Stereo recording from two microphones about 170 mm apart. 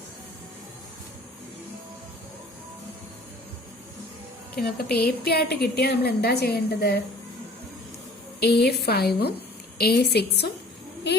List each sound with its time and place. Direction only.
4.5 s a woman's voice: 65° left (ahead or behind)
8.4 s a woman's voice: 75° left (ahead or behind)